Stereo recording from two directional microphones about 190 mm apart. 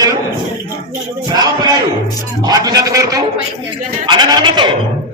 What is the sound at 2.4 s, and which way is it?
A man's voice, 20° right (ahead or behind).